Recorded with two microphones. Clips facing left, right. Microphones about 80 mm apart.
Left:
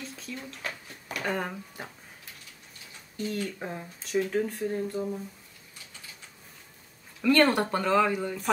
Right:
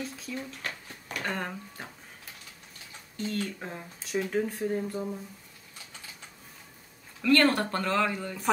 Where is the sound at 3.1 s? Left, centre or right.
Centre.